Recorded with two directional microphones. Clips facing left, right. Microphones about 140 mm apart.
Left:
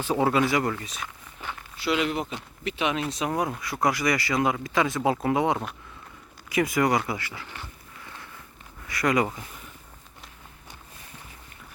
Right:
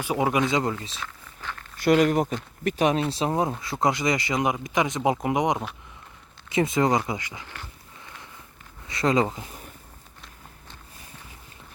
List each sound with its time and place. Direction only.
0.0 s speech: 15° right (ahead or behind)
1.0 s walk: 15° left (ahead or behind)
1.8 s speech: 50° right (ahead or behind)
3.1 s speech: 30° right (ahead or behind)
7.6 s a sound: 20° right (ahead or behind)
8.9 s speech: 25° right (ahead or behind)